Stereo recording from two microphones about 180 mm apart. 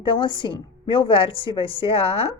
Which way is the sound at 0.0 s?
25° left (ahead or behind).